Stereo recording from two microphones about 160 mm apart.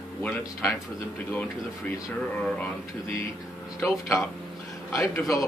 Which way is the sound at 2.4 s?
10° left (ahead or behind).